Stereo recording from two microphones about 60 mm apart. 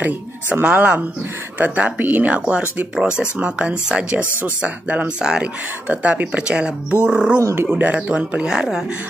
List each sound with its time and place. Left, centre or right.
0.0 s speech: right
5.2 s speech: centre
5.9 s speech: right
8.5 s speech: centre